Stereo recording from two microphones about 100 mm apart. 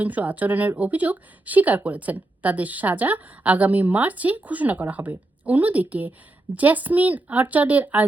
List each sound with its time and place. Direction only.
0.0 s a woman's voice: 15° right (ahead or behind)